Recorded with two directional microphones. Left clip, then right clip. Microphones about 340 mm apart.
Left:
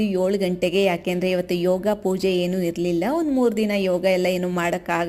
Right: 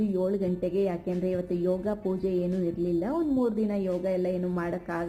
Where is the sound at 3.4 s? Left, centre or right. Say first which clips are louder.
Left 8 dB; centre.